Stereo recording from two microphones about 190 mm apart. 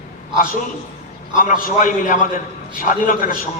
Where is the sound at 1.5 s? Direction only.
45° left (ahead or behind).